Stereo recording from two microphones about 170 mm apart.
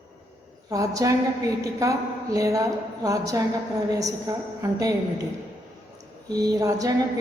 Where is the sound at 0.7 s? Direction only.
20° right (ahead or behind).